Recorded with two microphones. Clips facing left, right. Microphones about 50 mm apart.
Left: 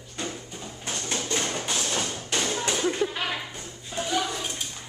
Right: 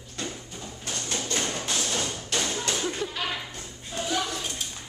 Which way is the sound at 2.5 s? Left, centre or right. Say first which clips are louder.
Left 3 dB; centre.